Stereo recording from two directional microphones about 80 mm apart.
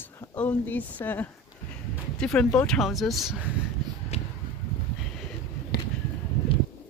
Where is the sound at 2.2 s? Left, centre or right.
Centre.